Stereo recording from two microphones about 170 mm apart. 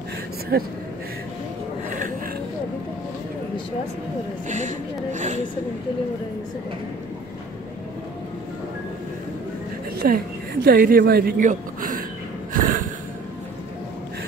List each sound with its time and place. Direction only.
0.5 s speech: 65° right (ahead or behind)
4.5 s speech: 45° right (ahead or behind)
9.9 s speech: 60° right (ahead or behind)
12.5 s a sound: 50° right (ahead or behind)